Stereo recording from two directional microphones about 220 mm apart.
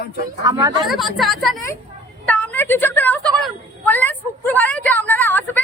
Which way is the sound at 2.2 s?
5° left (ahead or behind).